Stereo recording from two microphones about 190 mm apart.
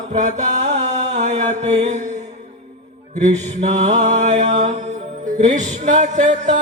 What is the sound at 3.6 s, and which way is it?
Mantra, 40° right (ahead or behind).